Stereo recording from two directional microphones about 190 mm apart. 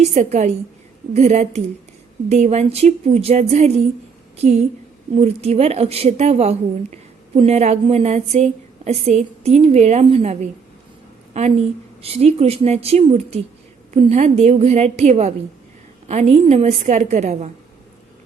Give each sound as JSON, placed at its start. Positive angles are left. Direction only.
{"t": 0.0, "sound": "a woman's voice", "side_deg": -35}